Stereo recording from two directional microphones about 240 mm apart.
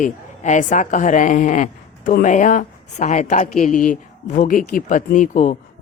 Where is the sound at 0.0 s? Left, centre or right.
Left.